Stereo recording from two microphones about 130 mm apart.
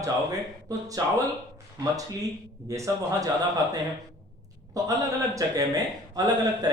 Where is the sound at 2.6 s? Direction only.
25° right (ahead or behind).